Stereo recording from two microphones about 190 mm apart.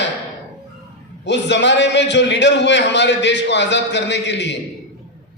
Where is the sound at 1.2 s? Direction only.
65° left (ahead or behind).